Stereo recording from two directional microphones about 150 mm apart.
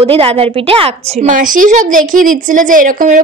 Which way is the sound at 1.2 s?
60° right (ahead or behind).